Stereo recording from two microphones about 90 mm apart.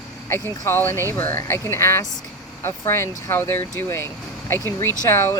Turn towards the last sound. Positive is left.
turn(degrees=30)  # may be behind; listen again after turning